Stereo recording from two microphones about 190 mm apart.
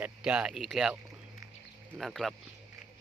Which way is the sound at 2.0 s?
Centre (ahead or behind).